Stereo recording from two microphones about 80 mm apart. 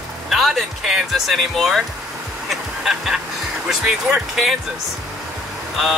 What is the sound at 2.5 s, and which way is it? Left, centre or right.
Music, centre.